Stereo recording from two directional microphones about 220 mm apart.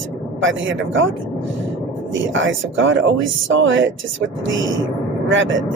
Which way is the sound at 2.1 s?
60° right (ahead or behind).